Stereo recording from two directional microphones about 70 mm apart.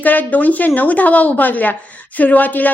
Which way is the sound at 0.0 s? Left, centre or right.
Left.